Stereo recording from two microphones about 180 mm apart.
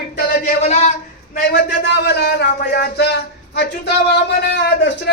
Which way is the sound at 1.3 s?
60° left (ahead or behind).